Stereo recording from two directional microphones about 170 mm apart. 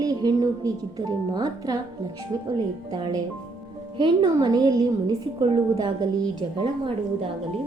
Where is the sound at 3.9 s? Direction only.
25° right (ahead or behind).